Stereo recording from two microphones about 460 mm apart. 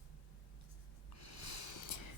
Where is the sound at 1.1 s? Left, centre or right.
Left.